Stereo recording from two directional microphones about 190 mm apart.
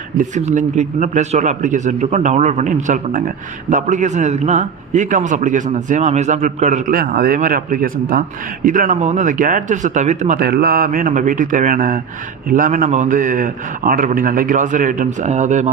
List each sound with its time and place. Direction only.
0.2 s a man's voice: 40° right (ahead or behind)